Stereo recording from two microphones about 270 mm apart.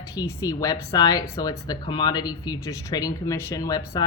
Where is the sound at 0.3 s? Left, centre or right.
Centre.